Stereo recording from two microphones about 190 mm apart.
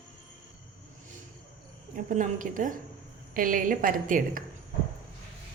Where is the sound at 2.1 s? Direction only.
45° right (ahead or behind).